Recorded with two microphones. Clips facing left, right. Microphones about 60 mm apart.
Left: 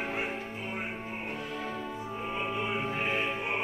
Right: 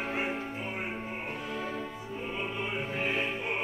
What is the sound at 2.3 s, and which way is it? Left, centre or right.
Music, centre.